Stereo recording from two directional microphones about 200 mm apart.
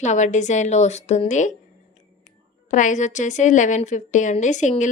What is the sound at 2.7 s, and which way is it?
A woman's voice, 40° left (ahead or behind).